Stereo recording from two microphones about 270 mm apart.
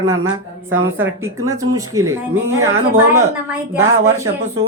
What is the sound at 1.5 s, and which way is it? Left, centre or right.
Speech, centre.